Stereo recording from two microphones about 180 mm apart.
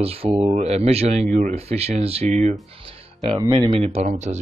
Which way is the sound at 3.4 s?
25° right (ahead or behind).